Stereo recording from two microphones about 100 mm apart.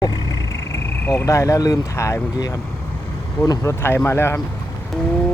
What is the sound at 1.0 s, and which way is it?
Speech, 25° left (ahead or behind).